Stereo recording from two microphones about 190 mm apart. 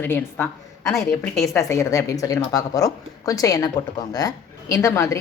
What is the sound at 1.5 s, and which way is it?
Speech, 15° left (ahead or behind).